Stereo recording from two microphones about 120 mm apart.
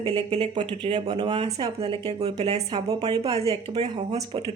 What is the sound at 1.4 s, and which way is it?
A woman's voice, 55° right (ahead or behind).